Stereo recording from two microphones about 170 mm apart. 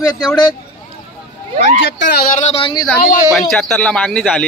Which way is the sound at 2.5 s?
30° left (ahead or behind).